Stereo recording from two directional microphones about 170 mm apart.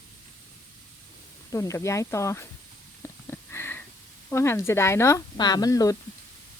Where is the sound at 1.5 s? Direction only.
20° left (ahead or behind).